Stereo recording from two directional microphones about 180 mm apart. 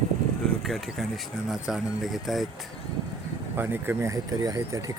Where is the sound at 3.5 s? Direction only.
10° right (ahead or behind).